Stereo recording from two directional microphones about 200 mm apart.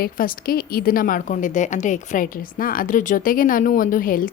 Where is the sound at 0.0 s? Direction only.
45° left (ahead or behind).